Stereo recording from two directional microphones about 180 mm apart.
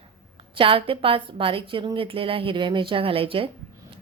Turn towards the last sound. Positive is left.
turn(degrees=-30)  # may be behind; listen again after turning